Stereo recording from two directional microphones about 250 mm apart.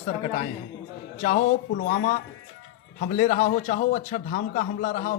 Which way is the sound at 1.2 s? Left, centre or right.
Left.